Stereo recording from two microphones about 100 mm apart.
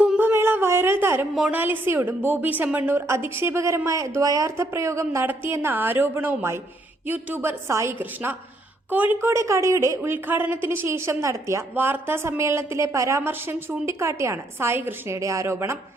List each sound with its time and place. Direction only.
0.2 s a sound: 25° right (ahead or behind)
1.4 s a woman's voice: 15° right (ahead or behind)
9.3 s a woman's voice: 30° right (ahead or behind)